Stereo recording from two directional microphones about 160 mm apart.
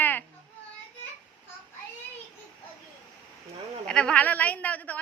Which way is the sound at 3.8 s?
5° left (ahead or behind).